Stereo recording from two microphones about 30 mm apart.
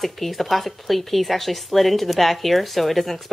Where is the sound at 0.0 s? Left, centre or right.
Centre.